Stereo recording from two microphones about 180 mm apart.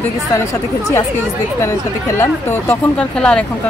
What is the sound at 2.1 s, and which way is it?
Speech, 15° left (ahead or behind).